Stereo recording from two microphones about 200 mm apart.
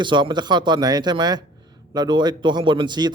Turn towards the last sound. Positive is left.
turn(degrees=-20)  # may be behind; listen again after turning